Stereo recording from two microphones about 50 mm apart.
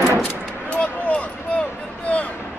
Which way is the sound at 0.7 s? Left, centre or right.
Left.